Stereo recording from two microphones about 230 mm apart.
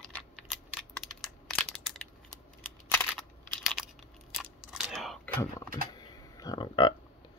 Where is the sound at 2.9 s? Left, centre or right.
Centre.